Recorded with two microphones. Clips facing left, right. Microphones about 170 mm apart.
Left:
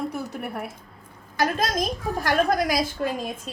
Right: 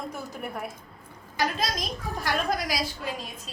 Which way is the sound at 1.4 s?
50° left (ahead or behind).